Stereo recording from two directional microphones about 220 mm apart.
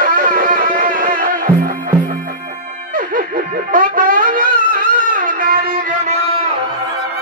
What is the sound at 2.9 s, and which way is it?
Music, 40° right (ahead or behind).